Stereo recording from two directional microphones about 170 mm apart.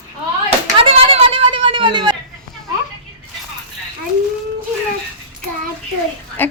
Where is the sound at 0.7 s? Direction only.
35° right (ahead or behind).